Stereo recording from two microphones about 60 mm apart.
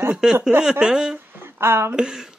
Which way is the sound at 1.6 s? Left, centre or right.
Right.